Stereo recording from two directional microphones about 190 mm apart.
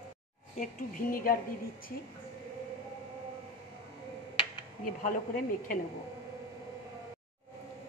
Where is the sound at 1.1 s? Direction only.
45° left (ahead or behind).